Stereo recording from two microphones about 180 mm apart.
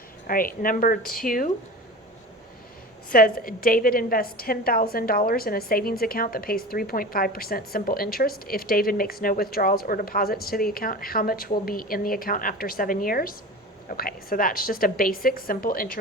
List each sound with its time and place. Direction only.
0.3 s a woman's voice: 50° left (ahead or behind)
3.1 s a woman's voice: 50° left (ahead or behind)